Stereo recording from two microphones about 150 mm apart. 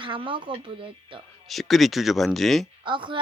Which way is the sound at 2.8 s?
35° right (ahead or behind).